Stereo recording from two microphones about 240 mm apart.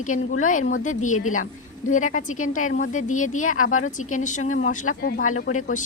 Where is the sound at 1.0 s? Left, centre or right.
Left.